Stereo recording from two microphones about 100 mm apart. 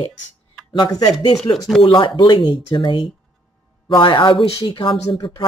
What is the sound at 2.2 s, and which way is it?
A woman's voice, 50° left (ahead or behind).